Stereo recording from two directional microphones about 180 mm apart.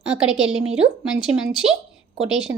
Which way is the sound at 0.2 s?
5° right (ahead or behind).